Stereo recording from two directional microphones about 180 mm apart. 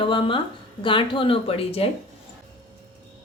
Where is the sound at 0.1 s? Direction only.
30° left (ahead or behind).